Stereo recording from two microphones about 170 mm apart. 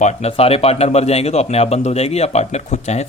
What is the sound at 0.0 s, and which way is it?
A man's voice, 35° left (ahead or behind).